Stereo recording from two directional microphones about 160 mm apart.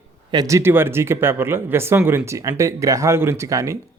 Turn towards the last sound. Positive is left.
turn(degrees=-20)  # may be behind; listen again after turning